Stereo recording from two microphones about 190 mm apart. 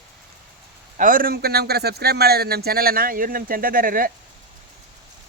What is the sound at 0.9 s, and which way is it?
Speech, 45° right (ahead or behind).